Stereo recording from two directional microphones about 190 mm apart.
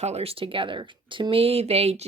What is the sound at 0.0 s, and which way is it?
Speech, 35° right (ahead or behind).